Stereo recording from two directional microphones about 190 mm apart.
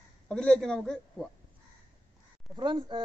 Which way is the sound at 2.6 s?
25° right (ahead or behind).